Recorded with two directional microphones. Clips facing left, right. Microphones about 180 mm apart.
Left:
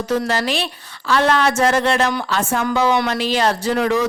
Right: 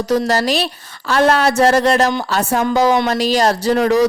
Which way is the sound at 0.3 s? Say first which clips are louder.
Right 4 dB; 40° right (ahead or behind).